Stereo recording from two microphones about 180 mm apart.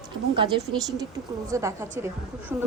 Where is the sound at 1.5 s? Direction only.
15° right (ahead or behind).